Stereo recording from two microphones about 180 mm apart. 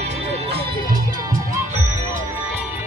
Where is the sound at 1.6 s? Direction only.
40° right (ahead or behind).